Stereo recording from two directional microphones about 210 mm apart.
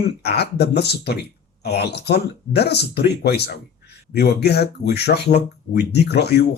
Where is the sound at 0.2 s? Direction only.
50° left (ahead or behind).